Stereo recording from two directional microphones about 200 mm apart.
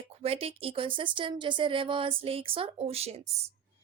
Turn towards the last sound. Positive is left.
turn(degrees=-30)  # may be behind; listen again after turning